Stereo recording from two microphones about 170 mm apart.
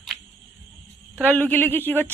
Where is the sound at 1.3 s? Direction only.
10° left (ahead or behind).